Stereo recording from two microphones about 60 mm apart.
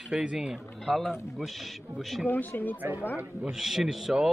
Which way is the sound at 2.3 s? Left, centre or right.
Left.